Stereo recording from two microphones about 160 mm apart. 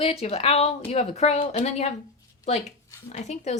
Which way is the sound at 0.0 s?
40° left (ahead or behind).